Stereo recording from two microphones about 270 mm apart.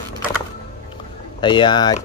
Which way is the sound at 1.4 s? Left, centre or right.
Centre.